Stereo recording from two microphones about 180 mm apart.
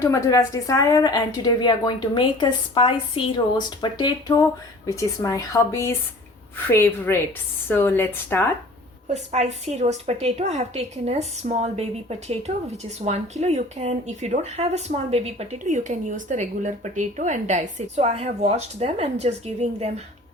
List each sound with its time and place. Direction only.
0.0 s a woman's voice: 15° left (ahead or behind)
9.1 s a woman's voice: 40° right (ahead or behind)